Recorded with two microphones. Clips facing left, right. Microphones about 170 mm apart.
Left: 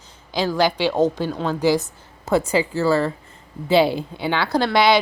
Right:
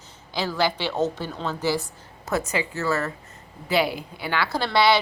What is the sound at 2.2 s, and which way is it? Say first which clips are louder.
A woman's voice: left 7 dB; 30° left (ahead or behind).